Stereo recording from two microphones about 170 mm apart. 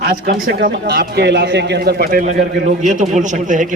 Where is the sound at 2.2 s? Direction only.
45° right (ahead or behind).